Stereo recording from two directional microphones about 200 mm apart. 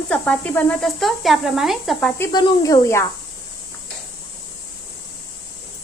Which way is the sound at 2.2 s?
20° left (ahead or behind).